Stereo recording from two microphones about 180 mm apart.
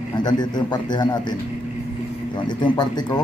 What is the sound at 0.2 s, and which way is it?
A man's voice, 25° left (ahead or behind).